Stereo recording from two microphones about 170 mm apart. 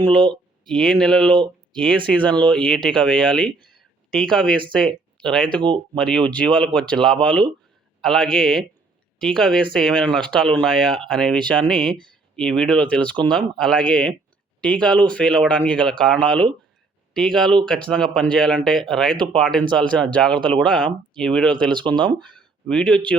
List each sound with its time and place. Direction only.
0.6 s speech: 5° left (ahead or behind)
5.5 s speech: 30° right (ahead or behind)
6.0 s speech: 5° left (ahead or behind)
21.7 s speech: 25° right (ahead or behind)
22.2 s speech: 5° left (ahead or behind)